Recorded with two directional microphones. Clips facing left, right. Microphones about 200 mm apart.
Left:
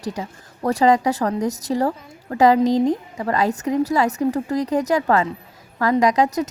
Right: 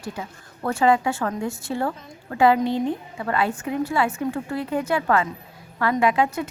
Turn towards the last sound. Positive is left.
turn(degrees=40)  # may be behind; listen again after turning